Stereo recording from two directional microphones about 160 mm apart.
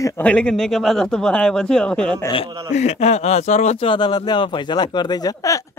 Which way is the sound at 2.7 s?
45° left (ahead or behind).